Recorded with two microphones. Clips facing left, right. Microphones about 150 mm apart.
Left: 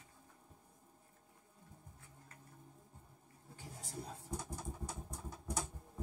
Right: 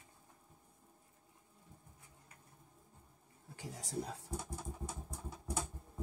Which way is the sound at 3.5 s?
90° right.